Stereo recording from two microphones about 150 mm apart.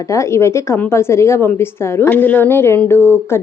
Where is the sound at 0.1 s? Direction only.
20° left (ahead or behind).